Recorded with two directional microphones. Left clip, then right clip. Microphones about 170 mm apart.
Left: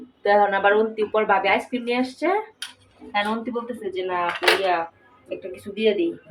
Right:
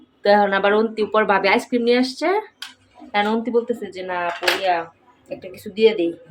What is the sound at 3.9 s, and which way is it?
Speech, 45° right (ahead or behind).